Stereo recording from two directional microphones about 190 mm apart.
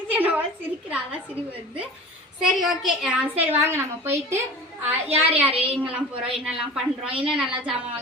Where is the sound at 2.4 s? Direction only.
Centre (ahead or behind).